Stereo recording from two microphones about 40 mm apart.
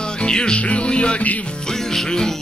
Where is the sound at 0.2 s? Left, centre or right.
Left.